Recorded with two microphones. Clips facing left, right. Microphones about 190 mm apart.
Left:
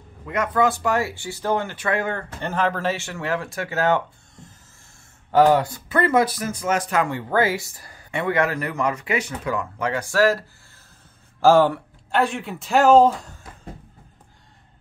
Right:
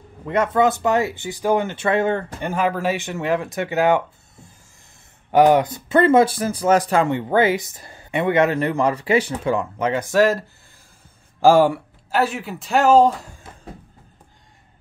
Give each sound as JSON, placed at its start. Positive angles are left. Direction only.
{"t": 0.3, "sound": "speech", "side_deg": -25}
{"t": 2.4, "sound": "speech", "side_deg": -10}